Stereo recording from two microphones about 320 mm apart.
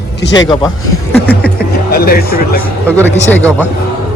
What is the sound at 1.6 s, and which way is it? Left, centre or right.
Speech, left.